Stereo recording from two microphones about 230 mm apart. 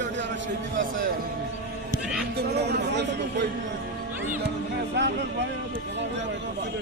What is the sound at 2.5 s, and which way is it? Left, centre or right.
Speech, right.